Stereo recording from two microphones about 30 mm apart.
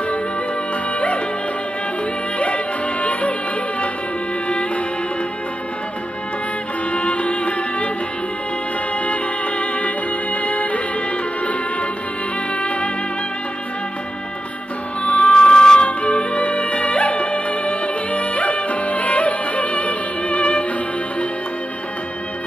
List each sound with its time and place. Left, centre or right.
2.3 s music: left
6.9 s music: left
9.0 s music: left
15.0 s music: left
16.0 s music: left